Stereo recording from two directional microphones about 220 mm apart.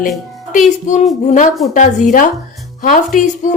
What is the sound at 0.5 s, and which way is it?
A woman's voice, 35° left (ahead or behind).